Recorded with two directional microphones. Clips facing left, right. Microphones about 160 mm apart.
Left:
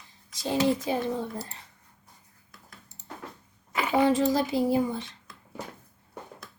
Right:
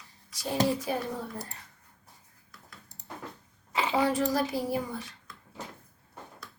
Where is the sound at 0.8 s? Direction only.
25° left (ahead or behind).